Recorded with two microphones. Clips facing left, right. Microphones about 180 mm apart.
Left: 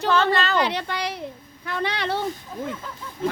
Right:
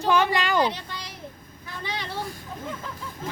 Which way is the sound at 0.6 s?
70° left (ahead or behind).